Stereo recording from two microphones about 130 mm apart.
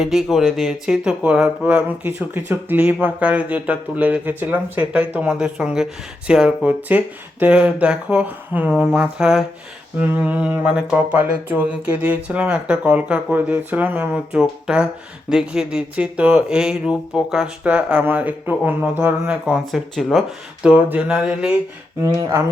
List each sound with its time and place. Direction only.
0.0 s speech: centre (ahead or behind)
22.0 s speech: 20° right (ahead or behind)